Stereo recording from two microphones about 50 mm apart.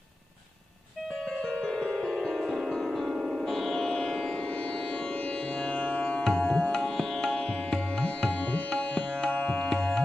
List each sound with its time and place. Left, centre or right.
1.5 s music: centre
3.1 s music: centre
3.4 s music: centre
5.5 s music: centre
8.7 s tabla: left